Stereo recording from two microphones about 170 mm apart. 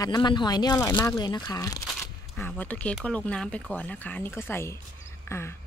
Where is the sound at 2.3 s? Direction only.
10° left (ahead or behind).